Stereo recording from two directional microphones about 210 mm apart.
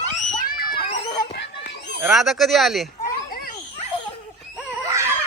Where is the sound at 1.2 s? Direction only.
50° left (ahead or behind).